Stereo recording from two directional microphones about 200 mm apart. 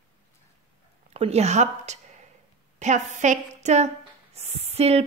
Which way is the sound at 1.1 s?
30° right (ahead or behind).